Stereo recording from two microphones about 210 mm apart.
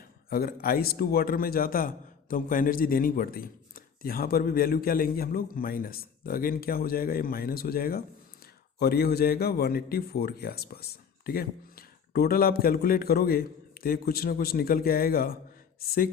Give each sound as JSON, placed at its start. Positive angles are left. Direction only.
{"t": 0.3, "sound": "a man's voice", "side_deg": 45}